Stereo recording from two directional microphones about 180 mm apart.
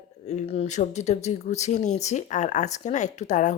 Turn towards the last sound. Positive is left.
turn(degrees=40)  # may be behind; listen again after turning